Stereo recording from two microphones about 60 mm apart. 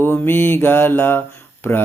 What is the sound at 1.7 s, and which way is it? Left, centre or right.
Speech, left.